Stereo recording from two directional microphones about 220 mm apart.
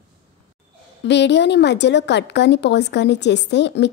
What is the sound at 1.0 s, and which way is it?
Speech, 50° left (ahead or behind).